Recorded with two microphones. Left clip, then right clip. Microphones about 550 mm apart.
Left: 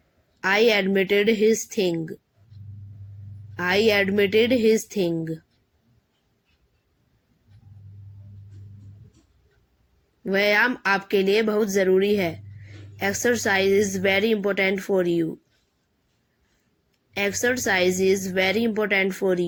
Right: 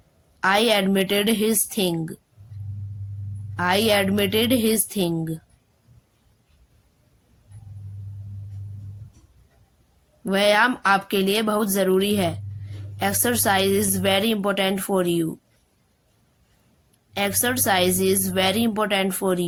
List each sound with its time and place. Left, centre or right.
0.3 s speech: right
3.5 s speech: right
10.2 s speech: right
17.4 s speech: right